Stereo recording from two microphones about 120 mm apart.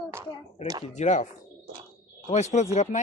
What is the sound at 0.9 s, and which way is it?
Speech, 75° left (ahead or behind).